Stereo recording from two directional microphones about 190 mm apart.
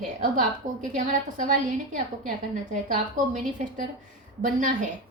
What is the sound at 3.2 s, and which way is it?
Speech, 45° right (ahead or behind).